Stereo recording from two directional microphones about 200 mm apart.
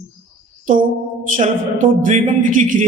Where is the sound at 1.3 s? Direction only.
40° right (ahead or behind).